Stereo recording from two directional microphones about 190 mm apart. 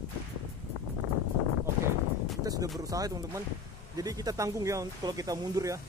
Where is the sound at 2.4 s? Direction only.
20° right (ahead or behind).